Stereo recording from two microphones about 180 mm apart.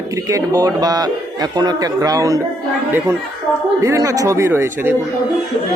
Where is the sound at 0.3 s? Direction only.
20° right (ahead or behind).